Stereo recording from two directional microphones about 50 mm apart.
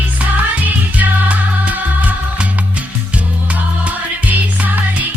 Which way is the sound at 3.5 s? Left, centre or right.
Right.